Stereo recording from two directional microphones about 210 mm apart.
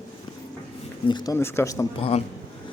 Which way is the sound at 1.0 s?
20° left (ahead or behind).